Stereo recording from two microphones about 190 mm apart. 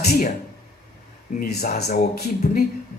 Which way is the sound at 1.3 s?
40° left (ahead or behind).